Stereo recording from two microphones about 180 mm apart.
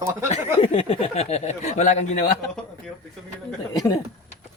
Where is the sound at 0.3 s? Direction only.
30° left (ahead or behind).